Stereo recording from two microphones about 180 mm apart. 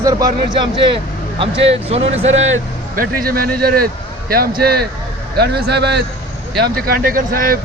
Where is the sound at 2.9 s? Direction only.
55° right (ahead or behind).